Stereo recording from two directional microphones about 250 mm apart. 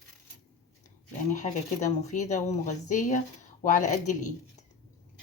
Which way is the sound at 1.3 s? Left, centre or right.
Left.